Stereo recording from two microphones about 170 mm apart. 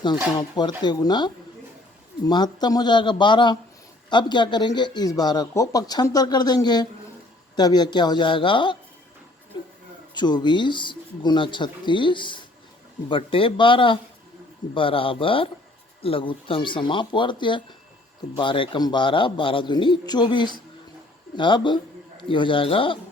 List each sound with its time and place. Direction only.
0.3 s speech: 25° left (ahead or behind)
10.2 s speech: 25° left (ahead or behind)